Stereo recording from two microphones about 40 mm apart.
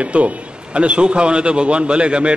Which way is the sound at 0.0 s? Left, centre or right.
Right.